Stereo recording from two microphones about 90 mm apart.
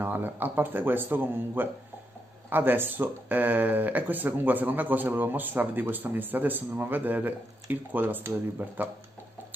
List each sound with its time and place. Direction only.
0.0 s speech: 25° right (ahead or behind)